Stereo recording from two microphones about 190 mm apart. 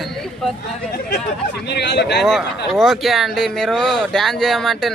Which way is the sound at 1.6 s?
65° left (ahead or behind).